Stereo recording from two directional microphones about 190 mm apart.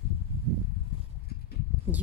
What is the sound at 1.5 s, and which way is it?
Clip-clop, 55° left (ahead or behind).